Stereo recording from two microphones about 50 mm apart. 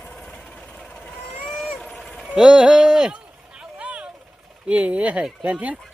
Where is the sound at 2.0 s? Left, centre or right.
Centre.